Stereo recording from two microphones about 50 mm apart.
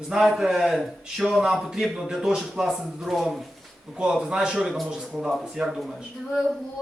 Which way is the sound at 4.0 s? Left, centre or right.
Right.